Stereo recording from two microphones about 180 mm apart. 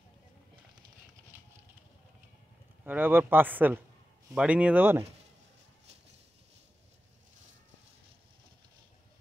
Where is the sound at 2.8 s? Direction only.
10° right (ahead or behind).